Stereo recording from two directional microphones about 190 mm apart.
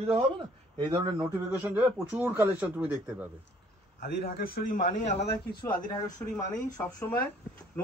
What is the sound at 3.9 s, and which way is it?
A man's voice, 60° left (ahead or behind).